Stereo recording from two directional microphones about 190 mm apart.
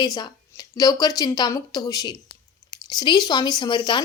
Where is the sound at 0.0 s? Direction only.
20° left (ahead or behind).